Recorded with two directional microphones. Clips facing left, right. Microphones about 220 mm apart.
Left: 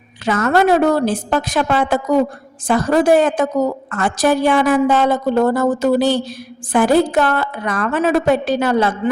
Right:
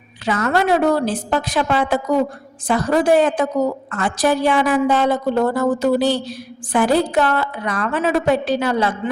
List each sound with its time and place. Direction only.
0.3 s a woman's voice: 45° left (ahead or behind)